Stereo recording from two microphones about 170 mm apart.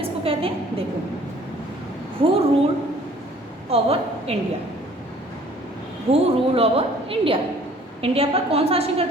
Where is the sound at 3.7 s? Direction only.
35° right (ahead or behind).